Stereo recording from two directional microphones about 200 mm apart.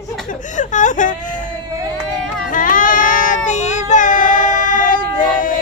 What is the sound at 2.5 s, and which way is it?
Child singing, 40° left (ahead or behind).